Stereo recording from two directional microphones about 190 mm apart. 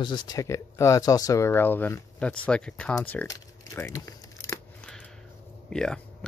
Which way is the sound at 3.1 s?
15° left (ahead or behind).